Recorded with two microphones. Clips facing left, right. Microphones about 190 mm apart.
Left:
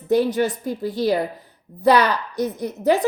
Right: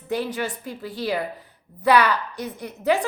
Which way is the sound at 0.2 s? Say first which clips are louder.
Left 8 dB; 40° left (ahead or behind).